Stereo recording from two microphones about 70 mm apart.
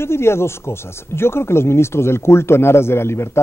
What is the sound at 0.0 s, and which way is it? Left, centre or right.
A man's voice, left.